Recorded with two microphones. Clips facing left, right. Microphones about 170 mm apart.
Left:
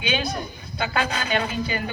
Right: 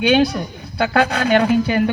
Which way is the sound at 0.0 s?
75° right (ahead or behind).